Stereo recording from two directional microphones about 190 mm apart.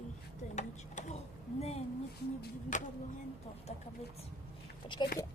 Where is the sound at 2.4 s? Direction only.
40° left (ahead or behind).